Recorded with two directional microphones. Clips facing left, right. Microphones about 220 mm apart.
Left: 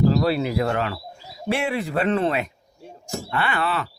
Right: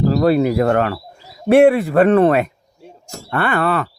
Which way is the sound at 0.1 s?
50° right (ahead or behind).